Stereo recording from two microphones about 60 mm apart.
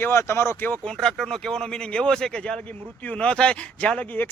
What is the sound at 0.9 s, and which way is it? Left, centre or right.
A man's voice, centre.